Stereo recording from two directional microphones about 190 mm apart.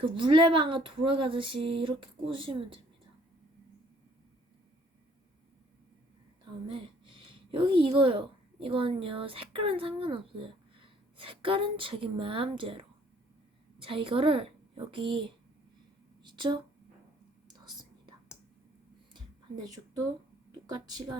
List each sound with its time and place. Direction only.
0.0 s speech: 25° right (ahead or behind)
6.7 s a woman's voice: 25° right (ahead or behind)
16.2 s a sound: 25° right (ahead or behind)
17.5 s whispering: 25° right (ahead or behind)
20.7 s speech: 20° right (ahead or behind)